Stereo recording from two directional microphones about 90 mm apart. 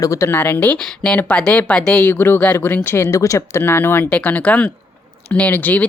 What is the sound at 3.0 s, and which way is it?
Speech, 35° left (ahead or behind).